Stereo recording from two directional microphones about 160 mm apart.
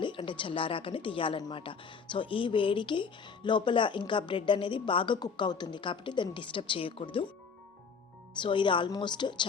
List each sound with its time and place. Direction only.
0.0 s speech: 30° left (ahead or behind)
8.4 s a woman's voice: 30° left (ahead or behind)